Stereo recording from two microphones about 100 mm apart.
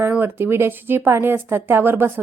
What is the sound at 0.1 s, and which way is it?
A woman's voice, 20° right (ahead or behind).